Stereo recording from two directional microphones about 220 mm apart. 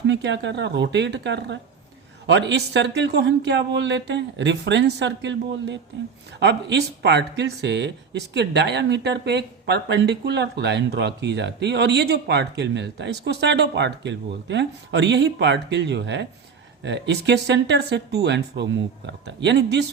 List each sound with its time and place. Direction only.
0.1 s speech: 55° right (ahead or behind)